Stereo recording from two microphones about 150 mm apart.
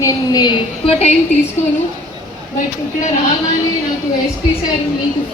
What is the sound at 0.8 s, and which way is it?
Speech, 45° left (ahead or behind).